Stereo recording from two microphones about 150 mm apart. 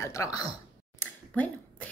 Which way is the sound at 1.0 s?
10° left (ahead or behind).